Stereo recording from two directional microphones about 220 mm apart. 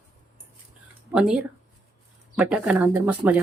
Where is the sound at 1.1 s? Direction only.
5° right (ahead or behind).